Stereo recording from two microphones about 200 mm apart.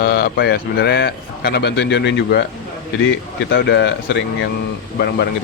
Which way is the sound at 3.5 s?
55° left (ahead or behind).